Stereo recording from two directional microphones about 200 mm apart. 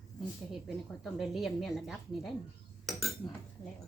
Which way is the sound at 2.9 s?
Centre (ahead or behind).